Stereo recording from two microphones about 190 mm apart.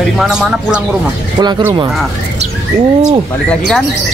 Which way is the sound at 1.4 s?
25° right (ahead or behind).